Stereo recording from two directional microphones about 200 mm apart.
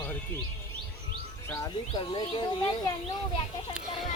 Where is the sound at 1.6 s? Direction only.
20° left (ahead or behind).